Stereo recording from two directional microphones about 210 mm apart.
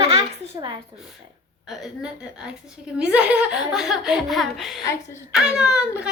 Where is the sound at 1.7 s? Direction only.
5° right (ahead or behind).